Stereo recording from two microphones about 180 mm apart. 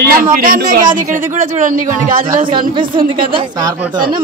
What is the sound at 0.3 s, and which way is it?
A man's voice, 50° right (ahead or behind).